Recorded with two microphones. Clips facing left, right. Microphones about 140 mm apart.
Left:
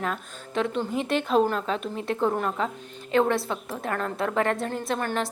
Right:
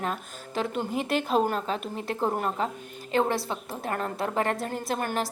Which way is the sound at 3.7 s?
30° right (ahead or behind).